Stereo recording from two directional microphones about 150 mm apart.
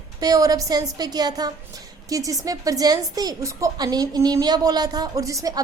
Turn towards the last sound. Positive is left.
turn(degrees=-20)  # may be behind; listen again after turning